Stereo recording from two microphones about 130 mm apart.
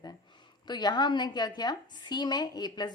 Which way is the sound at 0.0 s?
35° left (ahead or behind).